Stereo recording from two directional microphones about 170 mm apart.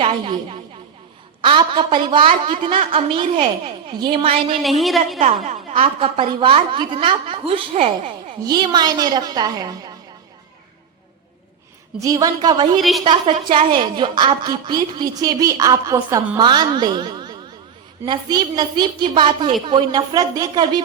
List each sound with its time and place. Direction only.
0.0 s a woman's voice: 35° right (ahead or behind)
4.8 s a woman's voice: centre (ahead or behind)
5.8 s a woman's voice: 30° right (ahead or behind)
8.4 s a woman's voice: 25° right (ahead or behind)
11.9 s a woman's voice: 20° right (ahead or behind)